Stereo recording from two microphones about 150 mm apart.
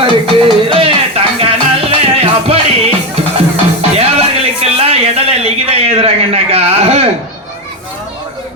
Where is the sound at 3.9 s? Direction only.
45° right (ahead or behind).